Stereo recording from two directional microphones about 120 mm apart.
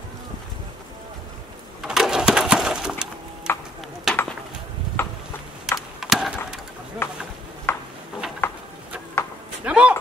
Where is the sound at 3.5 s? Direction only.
20° left (ahead or behind).